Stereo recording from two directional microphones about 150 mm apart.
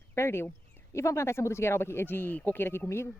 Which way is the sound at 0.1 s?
15° left (ahead or behind).